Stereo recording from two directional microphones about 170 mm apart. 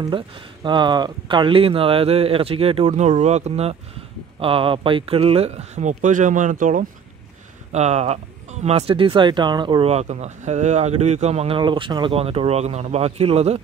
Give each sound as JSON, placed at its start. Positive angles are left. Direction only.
{"t": 0.7, "sound": "speech", "side_deg": -25}
{"t": 7.7, "sound": "speech", "side_deg": -40}
{"t": 9.8, "sound": "speech", "side_deg": -40}